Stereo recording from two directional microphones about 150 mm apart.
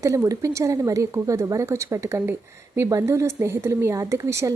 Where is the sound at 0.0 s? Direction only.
20° right (ahead or behind).